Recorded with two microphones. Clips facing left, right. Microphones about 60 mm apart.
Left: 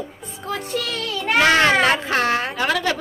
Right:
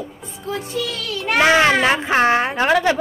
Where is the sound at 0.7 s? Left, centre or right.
Left.